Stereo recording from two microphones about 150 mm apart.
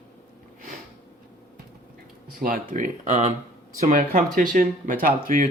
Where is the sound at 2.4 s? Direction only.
70° right (ahead or behind); by 3.3 s 50° right (ahead or behind).